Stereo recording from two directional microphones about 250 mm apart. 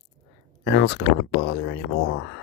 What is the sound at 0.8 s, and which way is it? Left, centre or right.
Speech, left.